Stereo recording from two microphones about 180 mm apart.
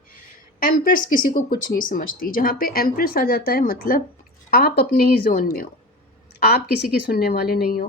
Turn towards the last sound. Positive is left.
turn(degrees=55)  # may be behind; listen again after turning